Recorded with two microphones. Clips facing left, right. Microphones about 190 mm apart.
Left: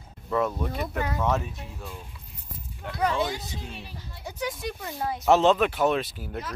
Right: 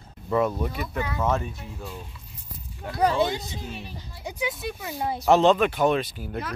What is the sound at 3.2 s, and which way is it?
Speech, centre (ahead or behind).